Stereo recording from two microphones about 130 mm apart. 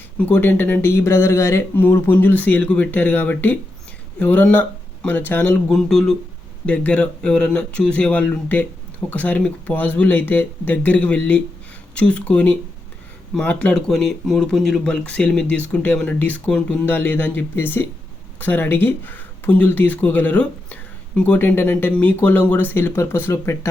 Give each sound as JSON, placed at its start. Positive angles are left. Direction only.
{"t": 0.2, "sound": "speech", "side_deg": 15}
{"t": 5.6, "sound": "speech", "side_deg": 5}